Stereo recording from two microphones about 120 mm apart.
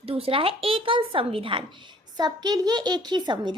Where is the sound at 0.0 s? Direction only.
50° right (ahead or behind).